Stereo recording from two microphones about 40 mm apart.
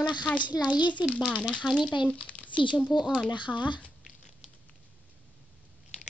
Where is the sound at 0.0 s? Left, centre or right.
Left.